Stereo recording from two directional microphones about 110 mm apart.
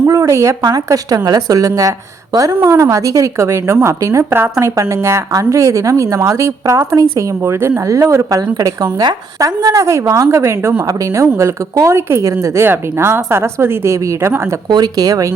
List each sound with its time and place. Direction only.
0.0 s a sound: 25° right (ahead or behind)
0.9 s a woman's voice: 35° right (ahead or behind)
14.7 s speech: 40° right (ahead or behind)